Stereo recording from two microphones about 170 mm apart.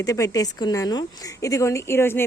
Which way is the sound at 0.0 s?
20° left (ahead or behind).